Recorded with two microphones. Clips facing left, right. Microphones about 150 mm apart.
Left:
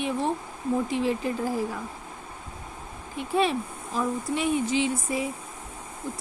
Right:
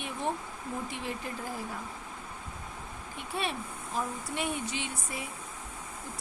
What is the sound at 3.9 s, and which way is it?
Speech, 90° left.